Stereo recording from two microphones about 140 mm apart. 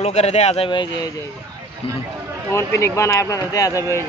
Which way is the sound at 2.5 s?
20° left (ahead or behind).